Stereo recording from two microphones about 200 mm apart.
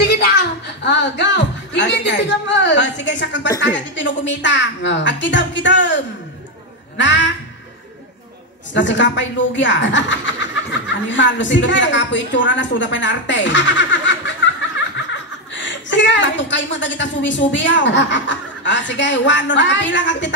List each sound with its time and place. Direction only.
0.0 s speech: 55° left (ahead or behind)
8.7 s speech: 65° left (ahead or behind)
15.5 s speech: 65° left (ahead or behind)